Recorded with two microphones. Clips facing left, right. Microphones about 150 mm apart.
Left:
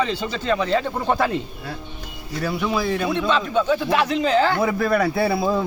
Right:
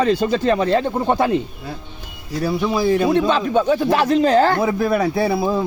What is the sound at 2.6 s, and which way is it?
Speech, 30° right (ahead or behind).